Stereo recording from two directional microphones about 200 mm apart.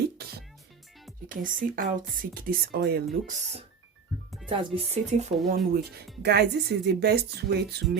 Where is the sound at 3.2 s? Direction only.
30° right (ahead or behind).